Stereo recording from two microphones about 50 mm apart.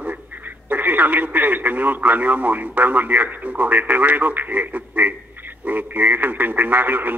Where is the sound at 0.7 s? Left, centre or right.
Right.